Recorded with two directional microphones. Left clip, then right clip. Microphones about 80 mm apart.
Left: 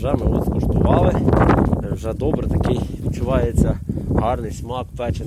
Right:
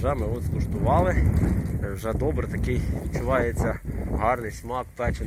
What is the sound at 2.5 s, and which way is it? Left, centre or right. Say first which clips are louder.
Speech: left 8 dB; left.